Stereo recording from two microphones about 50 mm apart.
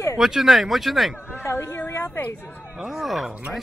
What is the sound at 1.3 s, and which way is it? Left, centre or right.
Speech, left.